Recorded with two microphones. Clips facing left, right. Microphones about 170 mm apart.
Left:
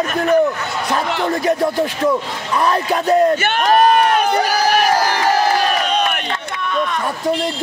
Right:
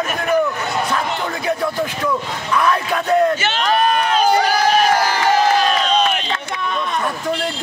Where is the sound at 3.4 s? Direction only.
50° left (ahead or behind).